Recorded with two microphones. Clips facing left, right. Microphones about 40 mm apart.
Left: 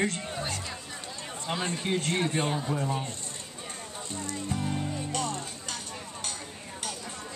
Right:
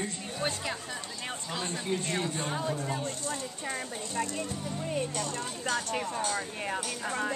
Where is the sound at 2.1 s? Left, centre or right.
Left.